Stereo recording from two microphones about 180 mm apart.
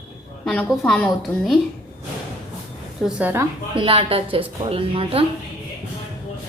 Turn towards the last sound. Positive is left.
turn(degrees=-30)  # may be behind; listen again after turning